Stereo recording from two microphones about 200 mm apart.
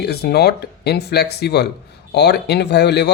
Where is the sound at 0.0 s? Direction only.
55° left (ahead or behind).